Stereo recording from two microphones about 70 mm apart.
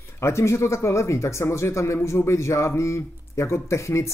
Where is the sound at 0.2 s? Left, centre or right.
Left.